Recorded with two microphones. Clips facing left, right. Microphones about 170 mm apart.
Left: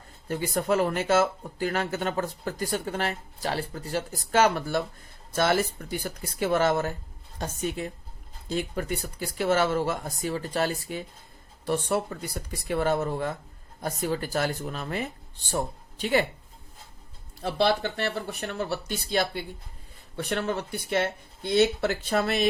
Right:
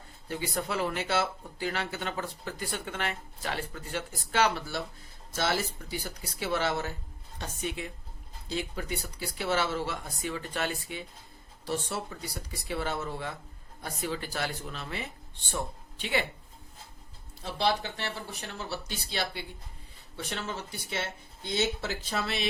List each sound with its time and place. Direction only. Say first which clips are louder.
0.3 s speech: left 7 dB; 45° left (ahead or behind)
11.6 s speech: left 7 dB; 55° left (ahead or behind)
17.4 s speech: left 5 dB; 60° left (ahead or behind)
20.1 s speech: left 8 dB; 55° left (ahead or behind)